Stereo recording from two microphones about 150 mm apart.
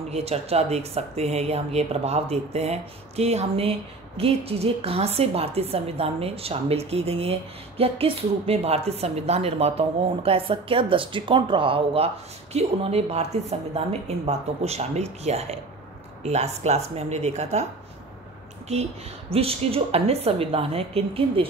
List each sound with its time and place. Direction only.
0.1 s a woman's voice: 45° right (ahead or behind)
18.7 s a woman's voice: 45° right (ahead or behind)